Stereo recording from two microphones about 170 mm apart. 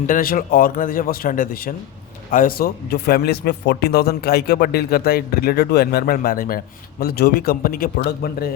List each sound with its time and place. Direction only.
0.1 s speech: 55° left (ahead or behind)